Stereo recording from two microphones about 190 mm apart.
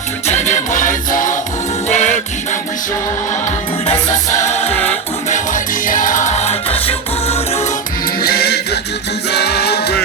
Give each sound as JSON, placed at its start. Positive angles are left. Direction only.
{"t": 0.3, "sound": "music", "side_deg": 35}
{"t": 3.8, "sound": "music", "side_deg": 40}
{"t": 4.7, "sound": "music", "side_deg": 10}
{"t": 5.3, "sound": "music", "side_deg": 45}
{"t": 8.2, "sound": "music", "side_deg": 55}